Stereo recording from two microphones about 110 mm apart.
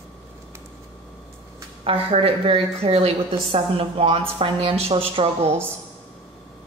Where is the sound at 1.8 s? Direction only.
60° right (ahead or behind).